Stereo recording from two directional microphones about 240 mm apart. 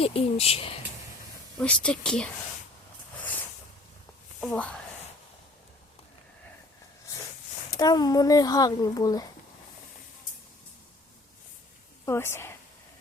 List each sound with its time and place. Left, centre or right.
0.0 s speech: left
1.5 s speech: centre
4.4 s speech: centre
7.8 s a child's voice: centre
12.0 s a child's voice: centre